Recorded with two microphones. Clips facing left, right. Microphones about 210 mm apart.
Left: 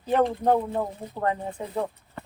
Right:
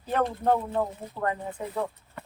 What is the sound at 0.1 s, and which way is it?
Speech, 20° left (ahead or behind).